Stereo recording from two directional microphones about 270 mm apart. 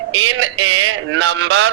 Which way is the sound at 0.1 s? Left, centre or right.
Right.